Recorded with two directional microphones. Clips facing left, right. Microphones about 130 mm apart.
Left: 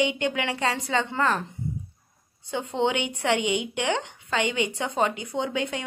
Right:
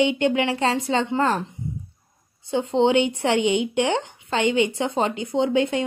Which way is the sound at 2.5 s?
30° right (ahead or behind).